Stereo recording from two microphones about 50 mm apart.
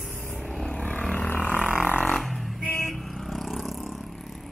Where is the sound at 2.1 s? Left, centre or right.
Centre.